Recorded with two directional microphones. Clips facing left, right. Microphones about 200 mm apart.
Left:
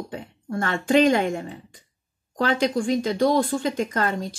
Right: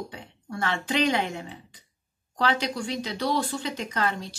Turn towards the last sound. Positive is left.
turn(degrees=50)  # may be behind; listen again after turning